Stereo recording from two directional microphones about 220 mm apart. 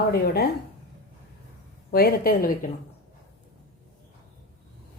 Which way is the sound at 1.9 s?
45° left (ahead or behind).